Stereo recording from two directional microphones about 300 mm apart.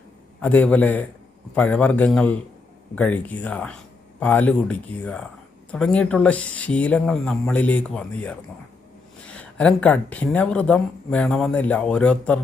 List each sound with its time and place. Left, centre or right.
0.4 s speech: centre